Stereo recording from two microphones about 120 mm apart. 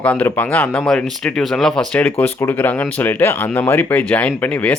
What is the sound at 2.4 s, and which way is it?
Speech, 20° left (ahead or behind).